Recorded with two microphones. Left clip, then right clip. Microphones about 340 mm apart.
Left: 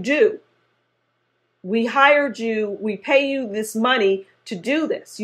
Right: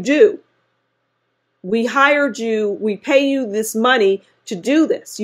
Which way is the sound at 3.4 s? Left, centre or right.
Right.